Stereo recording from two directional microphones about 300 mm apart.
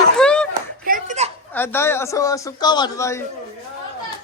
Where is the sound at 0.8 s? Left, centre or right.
Right.